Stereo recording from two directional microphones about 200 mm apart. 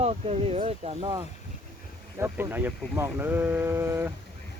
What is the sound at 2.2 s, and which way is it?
Speech, 10° right (ahead or behind).